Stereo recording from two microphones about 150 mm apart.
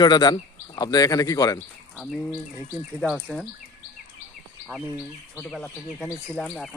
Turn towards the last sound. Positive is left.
turn(degrees=0)  # may be behind; listen again after turning